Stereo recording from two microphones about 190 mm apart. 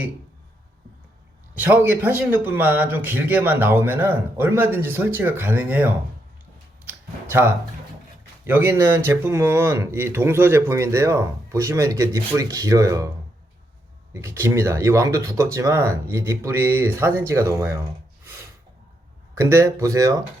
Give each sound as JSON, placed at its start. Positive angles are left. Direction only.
{"t": 1.5, "sound": "speech", "side_deg": -10}
{"t": 6.8, "sound": "a sound", "side_deg": -10}
{"t": 8.4, "sound": "speech", "side_deg": -10}
{"t": 14.1, "sound": "speech", "side_deg": -15}
{"t": 19.3, "sound": "speech", "side_deg": -15}